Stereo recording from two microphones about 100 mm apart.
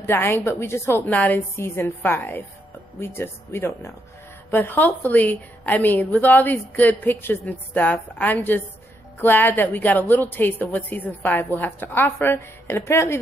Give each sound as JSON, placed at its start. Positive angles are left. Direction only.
{"t": 0.0, "sound": "a woman's voice", "side_deg": 20}